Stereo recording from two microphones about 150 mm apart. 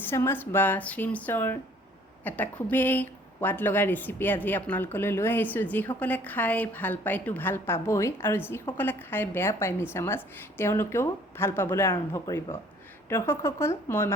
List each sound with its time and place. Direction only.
0.0 s a woman's voice: 15° left (ahead or behind)